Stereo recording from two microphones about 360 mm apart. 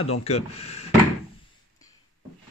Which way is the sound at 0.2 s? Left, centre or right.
Centre.